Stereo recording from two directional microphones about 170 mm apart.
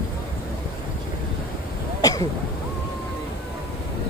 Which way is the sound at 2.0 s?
20° left (ahead or behind).